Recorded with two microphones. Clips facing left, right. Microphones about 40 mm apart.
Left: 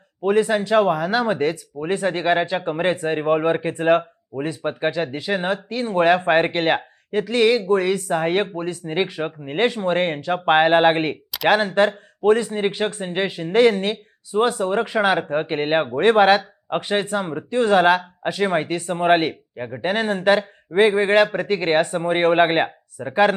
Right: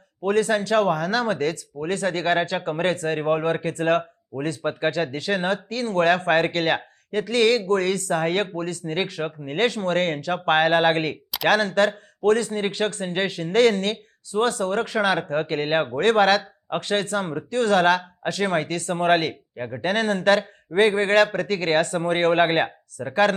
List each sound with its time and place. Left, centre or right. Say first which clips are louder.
0.2 s speech: left 3 dB; centre